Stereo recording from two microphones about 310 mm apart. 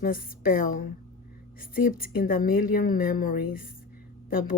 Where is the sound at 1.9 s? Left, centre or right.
Left.